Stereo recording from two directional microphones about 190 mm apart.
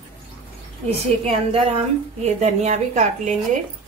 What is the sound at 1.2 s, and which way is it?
A woman's voice, 30° right (ahead or behind).